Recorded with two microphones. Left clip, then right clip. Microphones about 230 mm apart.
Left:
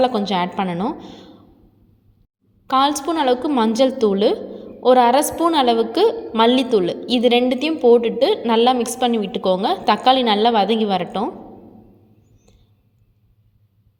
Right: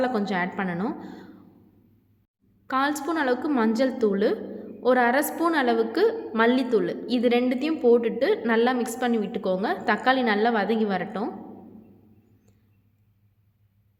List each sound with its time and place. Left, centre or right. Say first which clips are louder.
0.0 s a woman's voice: left 7 dB; centre
2.6 s a woman's voice: left 8 dB; centre